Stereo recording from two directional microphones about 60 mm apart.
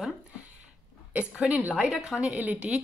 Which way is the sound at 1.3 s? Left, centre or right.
Right.